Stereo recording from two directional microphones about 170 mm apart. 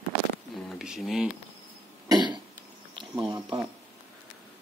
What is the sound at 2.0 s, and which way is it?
Cough, 25° right (ahead or behind).